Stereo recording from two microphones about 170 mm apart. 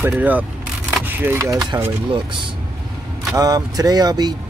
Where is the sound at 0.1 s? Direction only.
10° right (ahead or behind); by 2.2 s 25° right (ahead or behind).